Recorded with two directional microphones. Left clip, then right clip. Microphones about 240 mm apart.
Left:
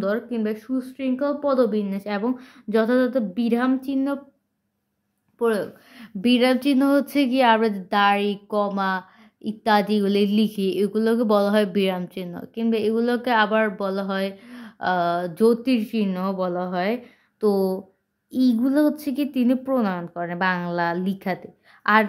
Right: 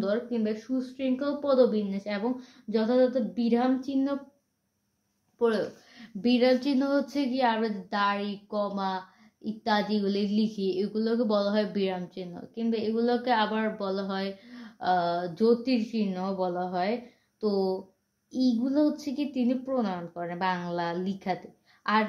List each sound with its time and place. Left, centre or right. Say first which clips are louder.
0.0 s speech: left 4 dB; left
5.4 s speech: left 4 dB; left